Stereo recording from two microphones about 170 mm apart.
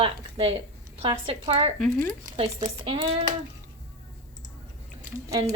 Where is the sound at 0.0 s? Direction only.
35° right (ahead or behind).